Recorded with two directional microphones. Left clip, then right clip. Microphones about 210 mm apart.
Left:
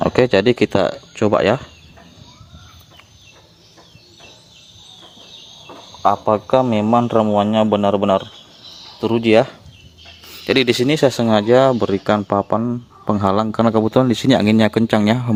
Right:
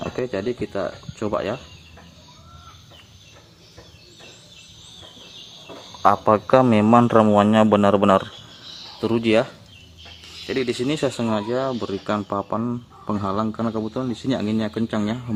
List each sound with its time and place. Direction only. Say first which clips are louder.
0.0 s speech: left 12 dB; 40° left (ahead or behind)
6.0 s a man's voice: left 1 dB; centre (ahead or behind)
9.0 s speech: left 5 dB; 10° left (ahead or behind)
10.4 s speech: left 8 dB; 45° left (ahead or behind); by 12.8 s 20° left (ahead or behind)
13.1 s speech: left 7 dB; 30° left (ahead or behind)